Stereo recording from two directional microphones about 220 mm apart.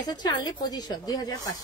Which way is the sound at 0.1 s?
20° left (ahead or behind).